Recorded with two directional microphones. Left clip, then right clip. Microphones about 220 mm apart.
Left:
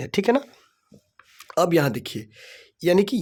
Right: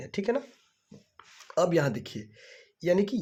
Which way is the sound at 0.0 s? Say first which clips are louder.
Left 9 dB; 50° left (ahead or behind).